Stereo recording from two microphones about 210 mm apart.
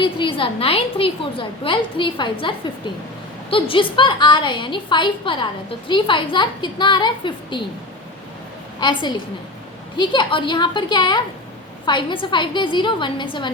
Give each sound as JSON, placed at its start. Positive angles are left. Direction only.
{"t": 0.0, "sound": "a woman's voice", "side_deg": 25}
{"t": 8.8, "sound": "a woman's voice", "side_deg": 20}